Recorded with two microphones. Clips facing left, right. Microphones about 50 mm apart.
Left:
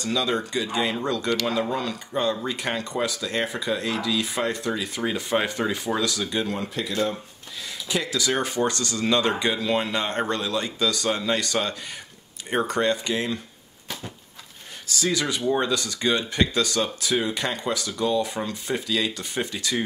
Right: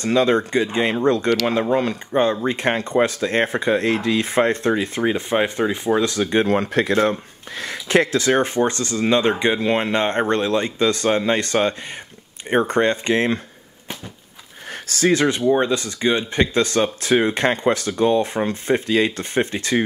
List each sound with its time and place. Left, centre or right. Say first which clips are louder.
0.0 s speech: right 8 dB; right
14.7 s speech: right 8 dB; right